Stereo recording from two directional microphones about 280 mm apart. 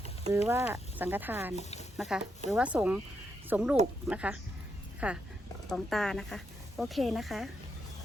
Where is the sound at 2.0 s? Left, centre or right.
Centre.